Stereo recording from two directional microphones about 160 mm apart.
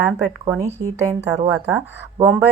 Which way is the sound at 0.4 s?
20° right (ahead or behind).